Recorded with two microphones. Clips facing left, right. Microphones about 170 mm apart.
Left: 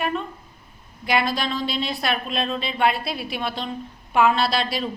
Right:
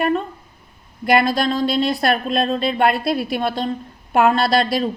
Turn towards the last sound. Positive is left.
turn(degrees=-45)  # may be behind; listen again after turning